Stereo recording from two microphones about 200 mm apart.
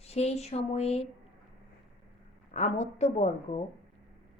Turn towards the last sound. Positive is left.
turn(degrees=35)  # may be behind; listen again after turning